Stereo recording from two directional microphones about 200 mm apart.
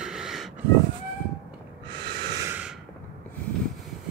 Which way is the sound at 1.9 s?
60° right (ahead or behind).